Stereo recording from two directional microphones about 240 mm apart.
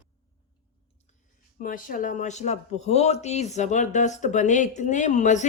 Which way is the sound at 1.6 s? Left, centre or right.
Left.